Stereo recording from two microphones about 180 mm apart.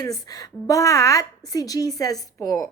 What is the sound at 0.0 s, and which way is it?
A woman's voice, 20° left (ahead or behind).